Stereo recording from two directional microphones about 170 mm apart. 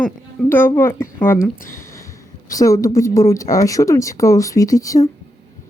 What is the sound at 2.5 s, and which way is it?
Speech, 20° left (ahead or behind).